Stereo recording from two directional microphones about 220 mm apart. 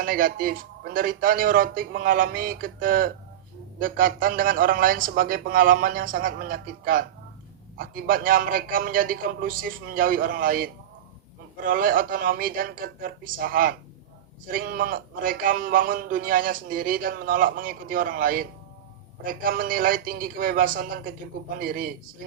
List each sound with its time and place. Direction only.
0.0 s a man's voice: 40° right (ahead or behind)